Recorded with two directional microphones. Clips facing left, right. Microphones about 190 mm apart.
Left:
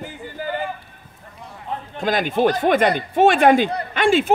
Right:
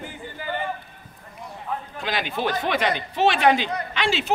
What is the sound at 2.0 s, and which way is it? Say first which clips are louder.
Speech: left 9 dB; 45° left (ahead or behind).